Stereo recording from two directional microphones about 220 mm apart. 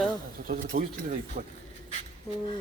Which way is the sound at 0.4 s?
40° right (ahead or behind).